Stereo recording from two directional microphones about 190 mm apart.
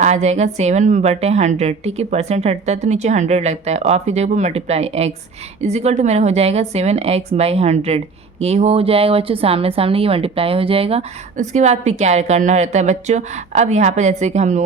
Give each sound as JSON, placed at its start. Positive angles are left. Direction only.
{"t": 0.0, "sound": "speech", "side_deg": -35}